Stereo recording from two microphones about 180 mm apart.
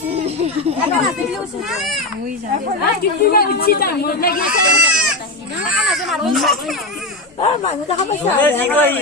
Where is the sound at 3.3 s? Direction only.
60° left (ahead or behind).